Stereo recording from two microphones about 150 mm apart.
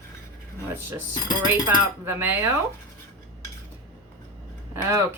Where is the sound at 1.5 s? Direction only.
15° right (ahead or behind).